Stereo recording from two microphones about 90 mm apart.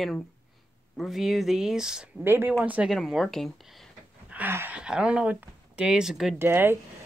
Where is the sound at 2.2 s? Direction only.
25° right (ahead or behind).